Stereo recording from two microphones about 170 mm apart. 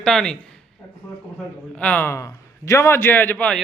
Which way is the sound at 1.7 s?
10° left (ahead or behind).